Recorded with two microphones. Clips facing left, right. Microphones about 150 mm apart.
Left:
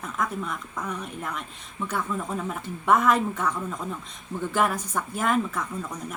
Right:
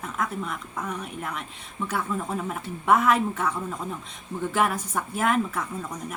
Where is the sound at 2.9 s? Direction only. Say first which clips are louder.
Even; centre (ahead or behind).